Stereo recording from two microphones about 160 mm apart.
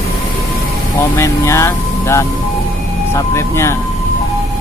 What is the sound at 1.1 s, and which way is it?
Speech, 15° left (ahead or behind).